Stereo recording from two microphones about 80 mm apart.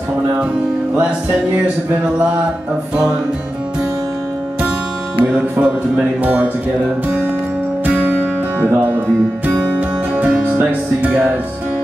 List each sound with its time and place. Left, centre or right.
5.2 s speech: centre
6.2 s music: right
7.8 s music: right